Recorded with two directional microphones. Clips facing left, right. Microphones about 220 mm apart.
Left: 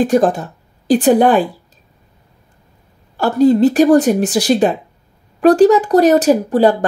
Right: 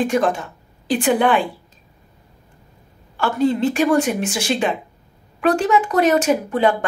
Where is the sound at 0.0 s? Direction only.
35° left (ahead or behind).